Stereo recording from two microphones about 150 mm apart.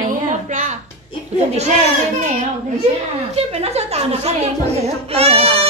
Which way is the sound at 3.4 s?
45° right (ahead or behind).